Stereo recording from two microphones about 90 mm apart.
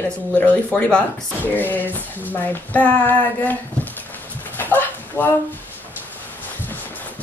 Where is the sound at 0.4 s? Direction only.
15° left (ahead or behind).